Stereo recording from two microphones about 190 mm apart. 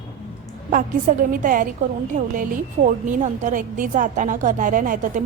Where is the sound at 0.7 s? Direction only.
45° right (ahead or behind).